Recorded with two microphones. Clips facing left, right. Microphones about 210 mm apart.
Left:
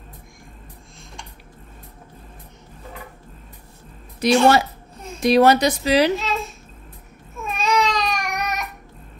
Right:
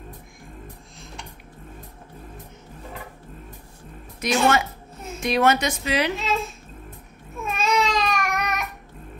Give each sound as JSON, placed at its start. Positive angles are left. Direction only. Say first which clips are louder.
{"t": 4.2, "sound": "a woman's voice", "louder": "left 5 dB", "side_deg": 35}
{"t": 6.1, "sound": "speech", "louder": "left 1 dB", "side_deg": 0}
{"t": 7.4, "sound": "child singing", "louder": "left 2 dB", "side_deg": 0}